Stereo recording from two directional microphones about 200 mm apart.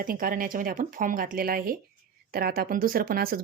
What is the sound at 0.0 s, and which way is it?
Speech, 45° right (ahead or behind).